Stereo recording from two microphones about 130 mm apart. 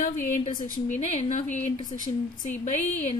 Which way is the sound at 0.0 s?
80° left.